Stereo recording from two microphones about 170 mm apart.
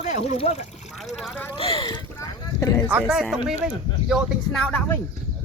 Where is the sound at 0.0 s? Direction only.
40° left (ahead or behind).